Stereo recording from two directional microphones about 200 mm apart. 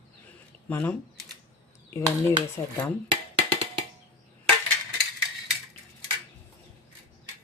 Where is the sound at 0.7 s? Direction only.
10° left (ahead or behind).